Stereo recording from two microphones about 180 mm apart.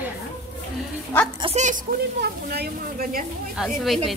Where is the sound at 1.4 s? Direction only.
40° right (ahead or behind).